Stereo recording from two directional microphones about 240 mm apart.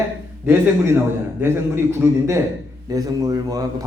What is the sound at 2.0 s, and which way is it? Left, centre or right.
Speech, centre.